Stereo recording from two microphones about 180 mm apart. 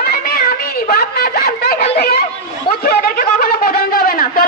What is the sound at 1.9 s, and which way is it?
Chatter, 60° left (ahead or behind).